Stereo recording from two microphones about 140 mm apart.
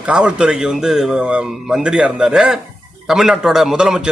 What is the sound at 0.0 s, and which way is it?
A man's voice, 10° right (ahead or behind).